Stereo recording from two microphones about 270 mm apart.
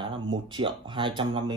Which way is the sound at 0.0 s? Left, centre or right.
Centre.